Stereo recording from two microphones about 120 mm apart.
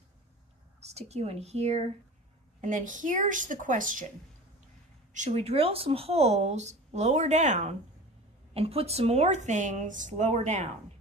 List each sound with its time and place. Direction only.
0.9 s speech: 60° right (ahead or behind)
2.6 s a woman's voice: 90° right
5.1 s speech: 80° right
8.5 s speech: 55° right (ahead or behind); by 10.7 s 75° right (ahead or behind)